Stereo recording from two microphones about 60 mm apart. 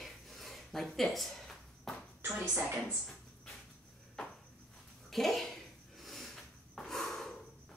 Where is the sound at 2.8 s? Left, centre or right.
Centre.